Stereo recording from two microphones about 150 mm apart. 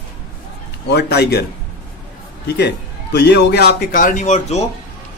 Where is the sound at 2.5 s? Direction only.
90° left; by 4.6 s 50° left (ahead or behind).